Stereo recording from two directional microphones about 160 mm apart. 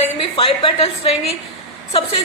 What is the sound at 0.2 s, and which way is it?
Speech, 35° left (ahead or behind).